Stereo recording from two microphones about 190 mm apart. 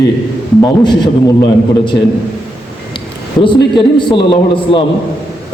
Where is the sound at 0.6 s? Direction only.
20° left (ahead or behind).